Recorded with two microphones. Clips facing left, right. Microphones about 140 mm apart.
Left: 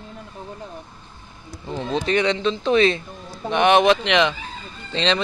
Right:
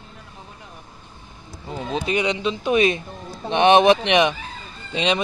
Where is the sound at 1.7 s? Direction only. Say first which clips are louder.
Left 2 dB; 5° right (ahead or behind).